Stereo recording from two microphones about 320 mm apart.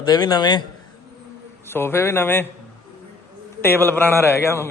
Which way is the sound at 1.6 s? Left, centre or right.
Centre.